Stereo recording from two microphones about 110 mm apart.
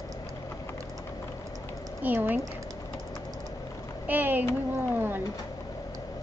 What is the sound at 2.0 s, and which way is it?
Speech, 15° right (ahead or behind).